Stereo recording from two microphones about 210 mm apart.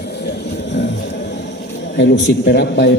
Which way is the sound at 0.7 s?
60° left (ahead or behind).